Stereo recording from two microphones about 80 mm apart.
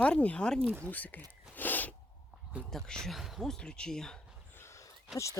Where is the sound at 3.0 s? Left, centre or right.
Centre.